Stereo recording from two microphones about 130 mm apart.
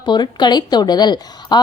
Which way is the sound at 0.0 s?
35° left (ahead or behind).